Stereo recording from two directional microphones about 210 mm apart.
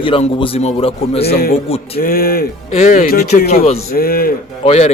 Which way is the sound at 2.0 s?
45° left (ahead or behind).